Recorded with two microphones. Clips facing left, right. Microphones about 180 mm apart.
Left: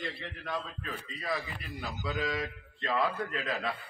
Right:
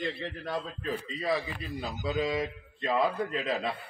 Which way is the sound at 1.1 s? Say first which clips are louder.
Right 4 dB; 20° right (ahead or behind).